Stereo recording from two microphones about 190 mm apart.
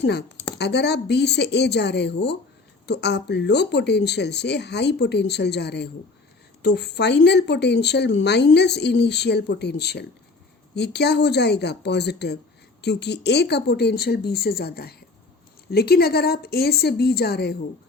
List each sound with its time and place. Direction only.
0.0 s speech: 60° left (ahead or behind)